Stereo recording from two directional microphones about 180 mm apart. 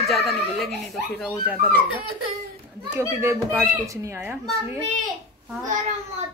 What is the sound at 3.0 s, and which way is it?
Speech, 15° right (ahead or behind).